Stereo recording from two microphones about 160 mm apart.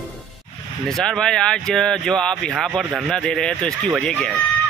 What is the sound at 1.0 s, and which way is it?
Speech, 5° left (ahead or behind).